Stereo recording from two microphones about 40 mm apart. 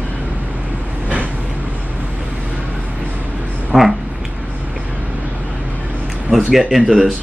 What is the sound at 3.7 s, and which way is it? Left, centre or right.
Cat, centre.